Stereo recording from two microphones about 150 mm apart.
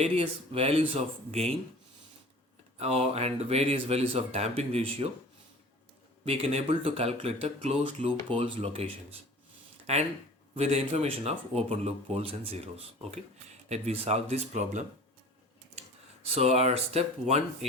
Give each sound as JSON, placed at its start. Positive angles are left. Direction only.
{"t": 0.0, "sound": "speech", "side_deg": -40}
{"t": 2.7, "sound": "speech", "side_deg": -45}
{"t": 6.2, "sound": "speech", "side_deg": -45}
{"t": 9.9, "sound": "speech", "side_deg": -45}
{"t": 16.3, "sound": "speech", "side_deg": -45}